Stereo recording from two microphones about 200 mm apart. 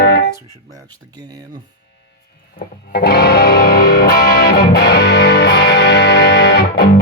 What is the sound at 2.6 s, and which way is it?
Music, 50° left (ahead or behind).